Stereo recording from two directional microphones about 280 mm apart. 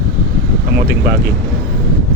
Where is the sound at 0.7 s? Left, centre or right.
Right.